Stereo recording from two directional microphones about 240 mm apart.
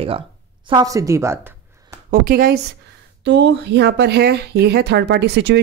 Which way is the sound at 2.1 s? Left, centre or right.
Right.